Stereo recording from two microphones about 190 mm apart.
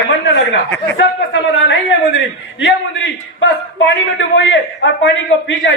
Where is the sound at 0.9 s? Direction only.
75° left (ahead or behind).